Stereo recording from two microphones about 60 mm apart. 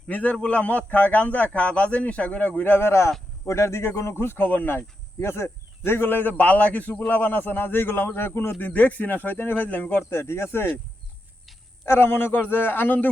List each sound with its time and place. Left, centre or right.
0.1 s speech: left
8.5 s speech: left
10.2 s speech: left
11.9 s speech: left